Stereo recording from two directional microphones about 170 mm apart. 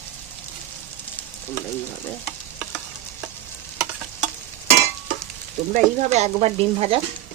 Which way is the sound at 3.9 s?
5° right (ahead or behind).